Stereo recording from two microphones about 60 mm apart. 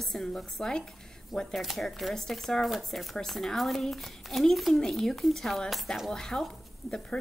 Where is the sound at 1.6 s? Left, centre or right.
Centre.